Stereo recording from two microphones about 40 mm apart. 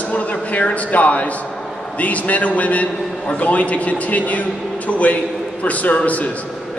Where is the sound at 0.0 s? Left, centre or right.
Left.